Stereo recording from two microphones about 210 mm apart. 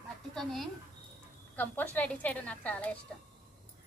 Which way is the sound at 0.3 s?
Centre (ahead or behind).